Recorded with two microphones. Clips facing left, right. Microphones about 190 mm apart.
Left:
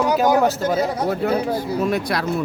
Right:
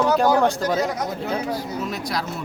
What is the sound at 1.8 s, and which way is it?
Speech, 55° left (ahead or behind).